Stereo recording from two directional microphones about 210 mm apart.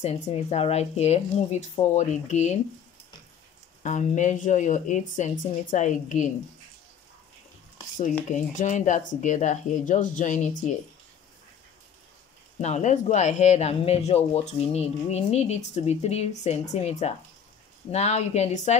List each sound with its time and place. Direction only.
0.0 s speech: 30° left (ahead or behind)
3.8 s speech: 35° left (ahead or behind)
8.3 s speech: 35° left (ahead or behind)
12.5 s speech: 30° left (ahead or behind)